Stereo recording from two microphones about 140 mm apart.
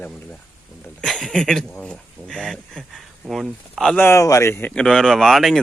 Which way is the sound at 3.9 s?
15° left (ahead or behind).